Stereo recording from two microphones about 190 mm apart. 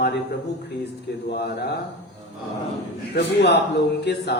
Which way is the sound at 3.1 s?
60° left (ahead or behind).